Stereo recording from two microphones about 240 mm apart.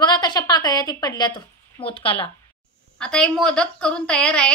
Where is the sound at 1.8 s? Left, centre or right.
Left.